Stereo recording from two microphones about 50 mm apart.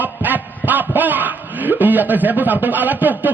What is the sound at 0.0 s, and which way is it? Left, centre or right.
A man's voice, right.